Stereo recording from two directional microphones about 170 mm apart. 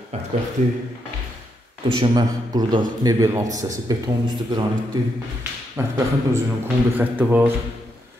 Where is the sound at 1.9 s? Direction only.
25° right (ahead or behind).